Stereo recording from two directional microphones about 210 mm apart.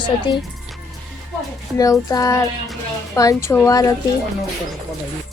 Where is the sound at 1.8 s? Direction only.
15° left (ahead or behind).